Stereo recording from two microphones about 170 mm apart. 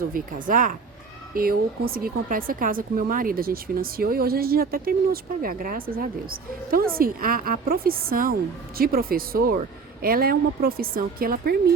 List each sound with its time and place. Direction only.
0.1 s speech: 55° right (ahead or behind)